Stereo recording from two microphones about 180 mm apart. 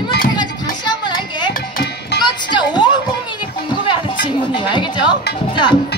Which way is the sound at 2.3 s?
25° left (ahead or behind).